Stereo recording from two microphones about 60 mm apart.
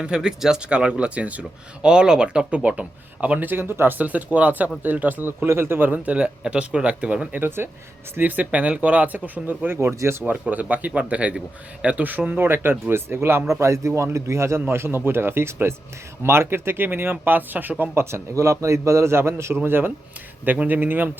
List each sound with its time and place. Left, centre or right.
0.0 s speech: centre
3.5 s speech: right; by 7.3 s centre
7.3 s speech: right
8.4 s speech: centre; by 9.9 s right
9.9 s a man's voice: right
10.4 s a man's voice: right
13.5 s speech: right
18.0 s a man's voice: right